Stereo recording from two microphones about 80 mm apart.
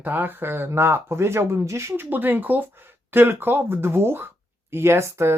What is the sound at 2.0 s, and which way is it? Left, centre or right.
Speech, right.